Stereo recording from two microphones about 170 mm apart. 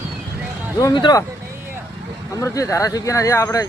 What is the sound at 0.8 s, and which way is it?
Speech, 25° left (ahead or behind).